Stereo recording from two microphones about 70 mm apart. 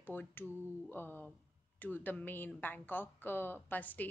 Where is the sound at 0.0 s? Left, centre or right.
Left.